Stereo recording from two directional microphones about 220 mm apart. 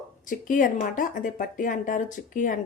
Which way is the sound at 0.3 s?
35° left (ahead or behind).